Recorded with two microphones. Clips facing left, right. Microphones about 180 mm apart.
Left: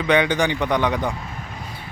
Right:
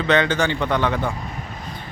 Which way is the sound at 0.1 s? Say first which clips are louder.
Left 1 dB; 15° left (ahead or behind).